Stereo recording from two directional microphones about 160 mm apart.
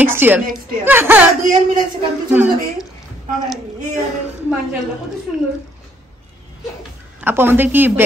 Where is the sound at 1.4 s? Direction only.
55° right (ahead or behind).